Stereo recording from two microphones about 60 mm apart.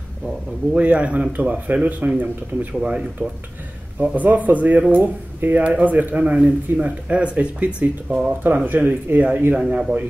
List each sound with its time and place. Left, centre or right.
0.7 s speech: right
8.6 s speech: right
9.6 s a man's voice: centre